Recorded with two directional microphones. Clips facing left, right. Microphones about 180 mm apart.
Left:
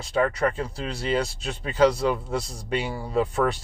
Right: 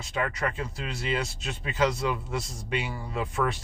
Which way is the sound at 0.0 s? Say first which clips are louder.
Left 7 dB; 35° left (ahead or behind).